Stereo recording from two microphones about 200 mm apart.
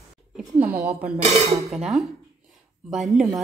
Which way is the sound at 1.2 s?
30° right (ahead or behind).